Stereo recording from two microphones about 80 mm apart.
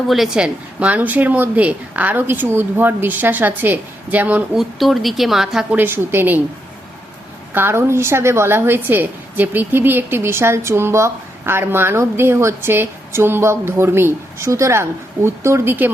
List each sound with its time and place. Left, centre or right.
0.1 s speech: centre
0.4 s a woman's voice: centre
4.5 s speech: centre
5.7 s a woman's voice: right
7.5 s a woman's voice: right